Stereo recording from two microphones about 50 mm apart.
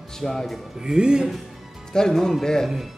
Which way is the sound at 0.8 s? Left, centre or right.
Centre.